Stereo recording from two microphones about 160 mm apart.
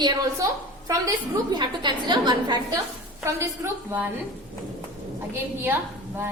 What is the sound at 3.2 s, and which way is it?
Speech, 15° right (ahead or behind).